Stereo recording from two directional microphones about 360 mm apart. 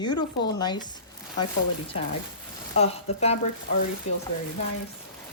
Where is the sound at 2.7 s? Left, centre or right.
Centre.